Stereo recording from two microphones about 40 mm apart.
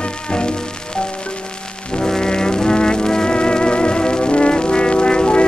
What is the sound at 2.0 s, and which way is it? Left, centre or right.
Music, centre.